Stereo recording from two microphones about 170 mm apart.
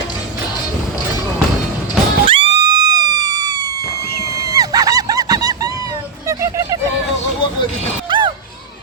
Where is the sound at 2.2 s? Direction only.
30° right (ahead or behind).